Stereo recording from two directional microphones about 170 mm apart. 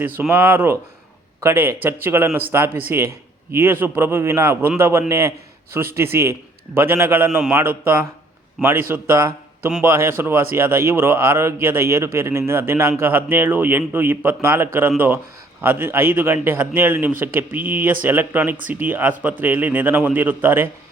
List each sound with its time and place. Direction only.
0.0 s a man's voice: 10° right (ahead or behind)